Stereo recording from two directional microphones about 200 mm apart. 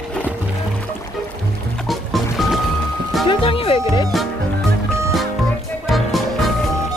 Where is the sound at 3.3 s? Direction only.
25° left (ahead or behind).